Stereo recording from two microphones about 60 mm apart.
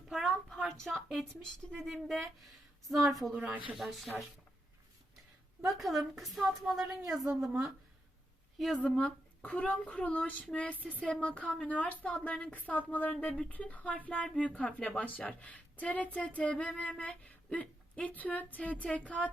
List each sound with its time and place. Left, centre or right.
0.1 s a sound: centre
1.3 s speech: centre
3.3 s speech: right
3.8 s speech: centre
5.8 s speech: centre
9.0 s a woman's voice: centre